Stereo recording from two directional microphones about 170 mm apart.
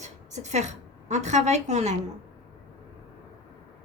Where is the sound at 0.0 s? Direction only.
45° right (ahead or behind).